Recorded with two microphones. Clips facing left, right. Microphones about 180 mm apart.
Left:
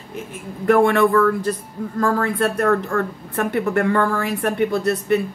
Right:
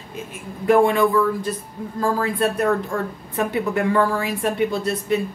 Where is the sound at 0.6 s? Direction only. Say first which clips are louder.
Left 1 dB; 65° left (ahead or behind).